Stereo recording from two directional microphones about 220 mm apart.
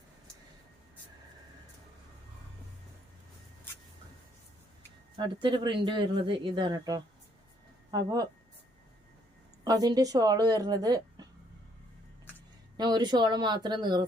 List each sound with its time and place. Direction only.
5.1 s speech: 20° right (ahead or behind)
9.6 s speech: 15° right (ahead or behind)
12.7 s speech: 20° right (ahead or behind)